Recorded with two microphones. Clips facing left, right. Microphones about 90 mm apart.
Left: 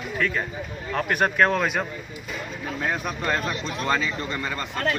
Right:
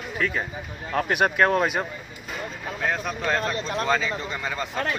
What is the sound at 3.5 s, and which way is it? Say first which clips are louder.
Speech: right 3 dB; 40° right (ahead or behind).